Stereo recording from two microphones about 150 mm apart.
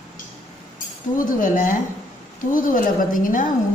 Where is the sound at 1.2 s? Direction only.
60° left (ahead or behind).